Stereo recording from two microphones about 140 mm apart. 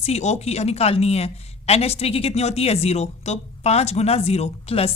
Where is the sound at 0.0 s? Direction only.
50° left (ahead or behind).